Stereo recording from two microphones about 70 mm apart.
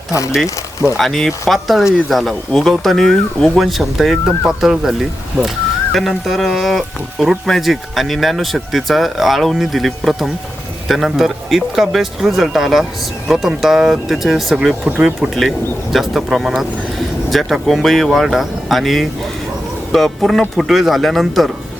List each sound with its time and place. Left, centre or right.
0.1 s speech: left
0.9 s speech: centre
15.9 s speech: centre